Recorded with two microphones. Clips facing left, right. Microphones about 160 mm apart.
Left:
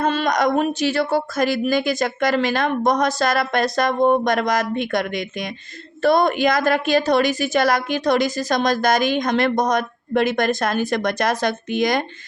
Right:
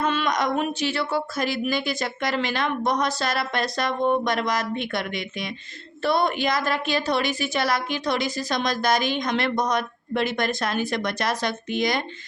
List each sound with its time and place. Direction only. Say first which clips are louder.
0.0 s a woman's voice: left 5 dB; 40° left (ahead or behind)